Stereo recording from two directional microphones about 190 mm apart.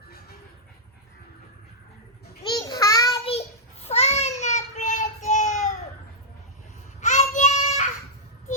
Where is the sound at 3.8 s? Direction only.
35° left (ahead or behind).